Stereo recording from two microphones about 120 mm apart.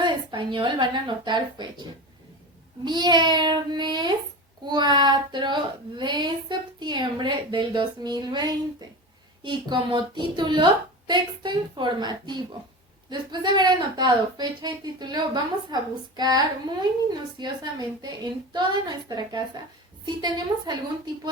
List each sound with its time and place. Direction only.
0.0 s a woman's voice: 40° right (ahead or behind)
2.8 s speech: 40° right (ahead or behind)